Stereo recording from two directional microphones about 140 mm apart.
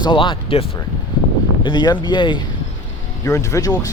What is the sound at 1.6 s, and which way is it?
Speech, 30° left (ahead or behind).